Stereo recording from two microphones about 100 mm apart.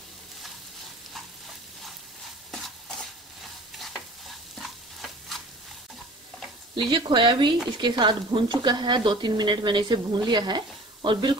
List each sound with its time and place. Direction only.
2.5 s stir: 5° left (ahead or behind)
6.7 s speech: 55° right (ahead or behind)